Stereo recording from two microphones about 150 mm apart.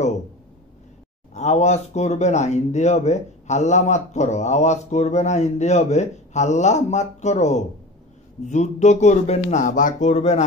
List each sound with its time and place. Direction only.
1.3 s speech: 50° left (ahead or behind)